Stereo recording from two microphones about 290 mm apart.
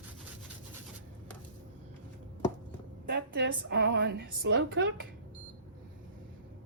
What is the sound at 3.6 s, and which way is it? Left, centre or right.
Speech, right.